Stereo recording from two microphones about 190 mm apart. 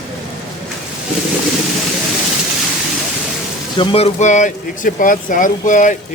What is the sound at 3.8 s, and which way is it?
Speech, 30° left (ahead or behind).